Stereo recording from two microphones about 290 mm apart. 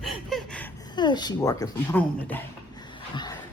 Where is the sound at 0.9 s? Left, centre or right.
Centre.